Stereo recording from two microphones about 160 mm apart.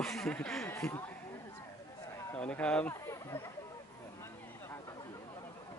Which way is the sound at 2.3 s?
10° left (ahead or behind).